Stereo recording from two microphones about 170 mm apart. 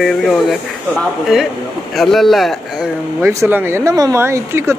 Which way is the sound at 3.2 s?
15° right (ahead or behind).